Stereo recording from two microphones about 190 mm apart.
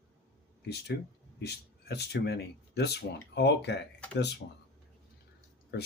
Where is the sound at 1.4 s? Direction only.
60° left (ahead or behind).